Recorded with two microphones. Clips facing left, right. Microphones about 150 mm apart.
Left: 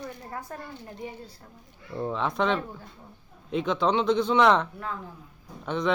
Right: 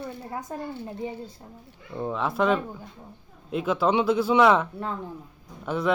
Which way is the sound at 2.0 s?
5° right (ahead or behind).